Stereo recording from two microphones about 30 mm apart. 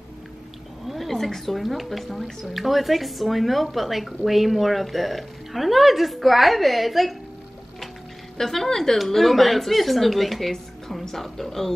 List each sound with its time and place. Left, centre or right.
0.9 s speech: centre
8.4 s a woman's voice: centre
8.9 s speech: centre